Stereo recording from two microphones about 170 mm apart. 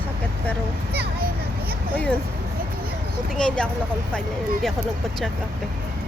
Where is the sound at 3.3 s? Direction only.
5° left (ahead or behind).